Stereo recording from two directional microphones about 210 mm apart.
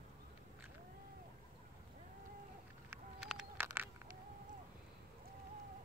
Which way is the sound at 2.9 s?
Centre (ahead or behind).